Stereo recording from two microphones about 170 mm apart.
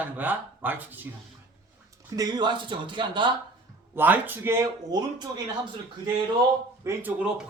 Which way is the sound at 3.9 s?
10° right (ahead or behind).